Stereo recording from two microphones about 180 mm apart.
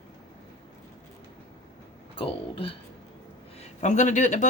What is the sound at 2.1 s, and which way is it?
Speech, 30° left (ahead or behind).